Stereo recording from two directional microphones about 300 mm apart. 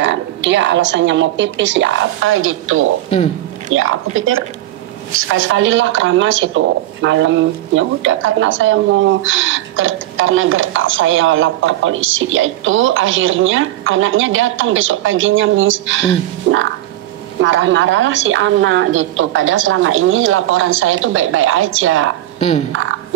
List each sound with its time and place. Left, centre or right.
0.0 s a woman's voice: right
16.5 s a sound: right
17.4 s a woman's voice: right